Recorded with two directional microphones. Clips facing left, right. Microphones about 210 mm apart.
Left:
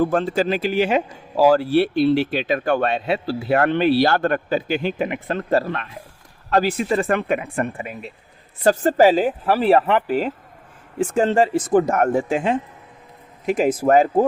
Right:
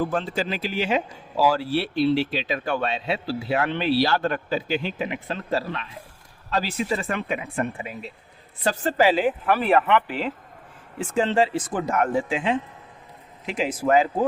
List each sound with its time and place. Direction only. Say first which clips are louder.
0.0 s speech: left 6 dB; 50° left (ahead or behind)